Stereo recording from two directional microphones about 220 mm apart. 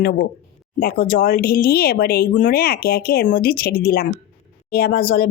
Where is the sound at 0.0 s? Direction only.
45° left (ahead or behind).